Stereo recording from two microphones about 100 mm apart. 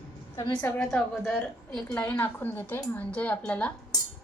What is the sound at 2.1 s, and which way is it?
A woman's voice, 20° left (ahead or behind).